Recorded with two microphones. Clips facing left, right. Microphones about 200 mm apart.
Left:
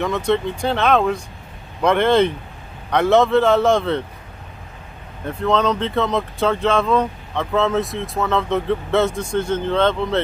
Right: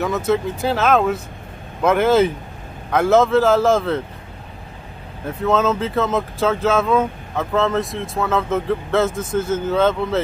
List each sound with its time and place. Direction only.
0.0 s speech: 5° right (ahead or behind)
5.2 s speech: 5° right (ahead or behind)